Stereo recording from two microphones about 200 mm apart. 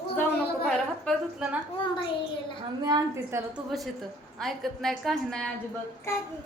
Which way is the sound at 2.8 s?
20° right (ahead or behind).